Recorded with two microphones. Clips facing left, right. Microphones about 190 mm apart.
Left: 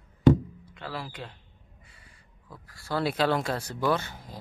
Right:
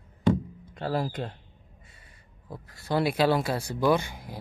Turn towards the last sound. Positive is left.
turn(degrees=-10)  # may be behind; listen again after turning